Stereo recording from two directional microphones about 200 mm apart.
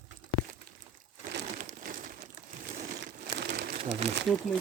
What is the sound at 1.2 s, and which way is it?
Crumpling, 40° right (ahead or behind).